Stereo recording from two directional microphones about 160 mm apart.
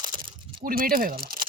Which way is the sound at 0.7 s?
65° right (ahead or behind).